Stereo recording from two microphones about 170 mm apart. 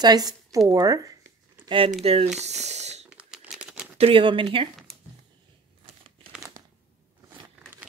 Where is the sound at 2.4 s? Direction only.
40° right (ahead or behind).